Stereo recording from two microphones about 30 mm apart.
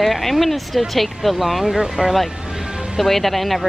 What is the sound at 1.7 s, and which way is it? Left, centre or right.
Speech, centre.